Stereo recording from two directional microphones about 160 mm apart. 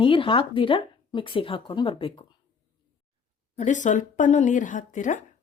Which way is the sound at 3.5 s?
50° left (ahead or behind).